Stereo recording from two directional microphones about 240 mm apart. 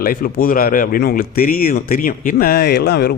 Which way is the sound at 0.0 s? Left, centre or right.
Left.